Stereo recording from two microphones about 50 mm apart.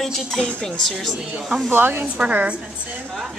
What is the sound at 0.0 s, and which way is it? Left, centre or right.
Speech, centre.